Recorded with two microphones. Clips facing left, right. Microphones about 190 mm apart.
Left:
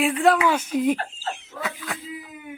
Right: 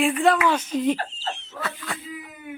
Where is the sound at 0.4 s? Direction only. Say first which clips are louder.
Left 1 dB; 10° left (ahead or behind).